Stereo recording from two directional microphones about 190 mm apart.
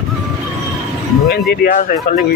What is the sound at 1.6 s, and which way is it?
Speech, 45° left (ahead or behind).